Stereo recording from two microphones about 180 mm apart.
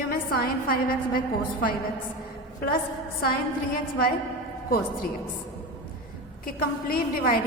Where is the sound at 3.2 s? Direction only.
55° left (ahead or behind).